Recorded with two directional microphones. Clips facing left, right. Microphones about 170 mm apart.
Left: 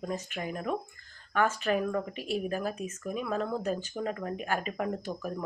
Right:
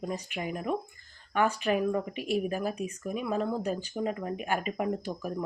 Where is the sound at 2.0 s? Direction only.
40° left (ahead or behind).